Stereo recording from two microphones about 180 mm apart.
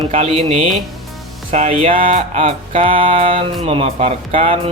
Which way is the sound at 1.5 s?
35° right (ahead or behind).